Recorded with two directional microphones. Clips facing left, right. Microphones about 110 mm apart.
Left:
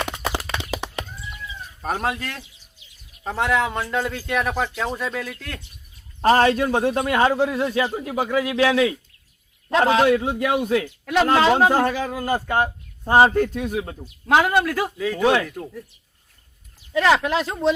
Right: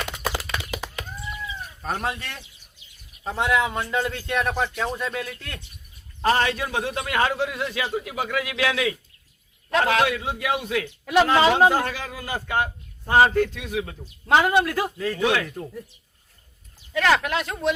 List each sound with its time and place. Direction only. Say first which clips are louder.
0.0 s a sound: left 3 dB; 30° left (ahead or behind)
1.8 s a man's voice: left 4 dB; 5° left (ahead or behind)
6.3 s a man's voice: left 9 dB; 40° left (ahead or behind)
11.0 s speech: right 3 dB; 5° right (ahead or behind)
11.7 s speech: left 5 dB; 45° left (ahead or behind)
13.1 s speech: left 2 dB; 25° left (ahead or behind)
13.5 s speech: left 9 dB; 45° left (ahead or behind)
14.3 s a man's voice: left 1 dB; centre (ahead or behind)
15.2 s a man's voice: left 4 dB; 35° left (ahead or behind)
15.4 s a man's voice: left 1 dB; 5° right (ahead or behind)
17.1 s speech: left 3 dB; 25° left (ahead or behind)